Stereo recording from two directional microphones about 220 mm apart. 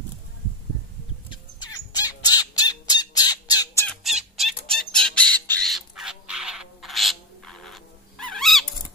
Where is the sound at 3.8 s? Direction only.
Centre (ahead or behind).